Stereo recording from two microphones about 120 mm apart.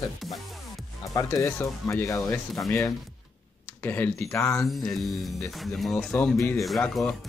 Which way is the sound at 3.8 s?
15° left (ahead or behind).